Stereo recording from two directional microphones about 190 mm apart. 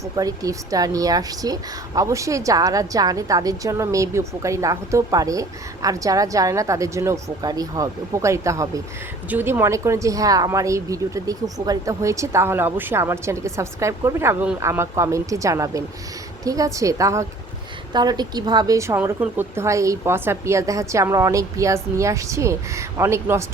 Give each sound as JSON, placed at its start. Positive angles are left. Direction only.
{"t": 0.0, "sound": "a woman's voice", "side_deg": -20}